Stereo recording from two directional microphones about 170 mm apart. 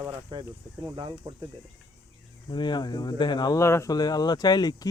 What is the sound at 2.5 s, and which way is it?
Speech, 25° left (ahead or behind).